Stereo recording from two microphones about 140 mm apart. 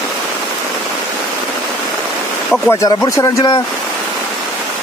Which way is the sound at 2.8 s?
25° left (ahead or behind).